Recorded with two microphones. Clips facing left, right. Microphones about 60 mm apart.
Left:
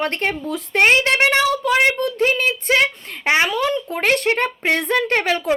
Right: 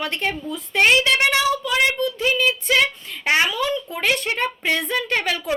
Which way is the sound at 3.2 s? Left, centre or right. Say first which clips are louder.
Left 2 dB; left.